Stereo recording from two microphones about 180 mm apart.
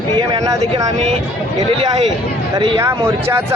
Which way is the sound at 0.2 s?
20° right (ahead or behind).